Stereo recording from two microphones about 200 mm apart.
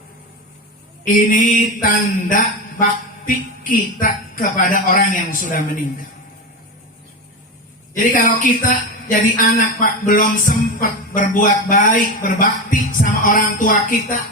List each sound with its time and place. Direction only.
1.0 s mantra: 40° left (ahead or behind)
3.2 s music: 45° left (ahead or behind)
7.9 s music: 45° left (ahead or behind)